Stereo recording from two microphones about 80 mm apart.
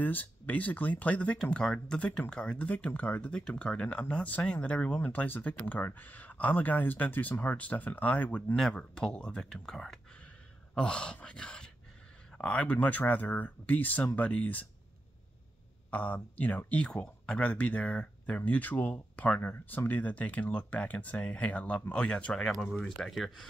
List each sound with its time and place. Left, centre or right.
0.0 s speech: left
15.9 s speech: left; by 23.4 s centre